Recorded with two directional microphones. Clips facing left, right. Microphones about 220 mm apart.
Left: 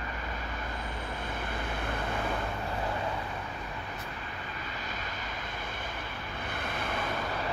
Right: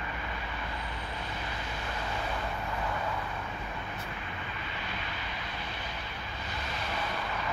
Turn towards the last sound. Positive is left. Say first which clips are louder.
# left 2 dB
turn(degrees=55)  # may be behind; listen again after turning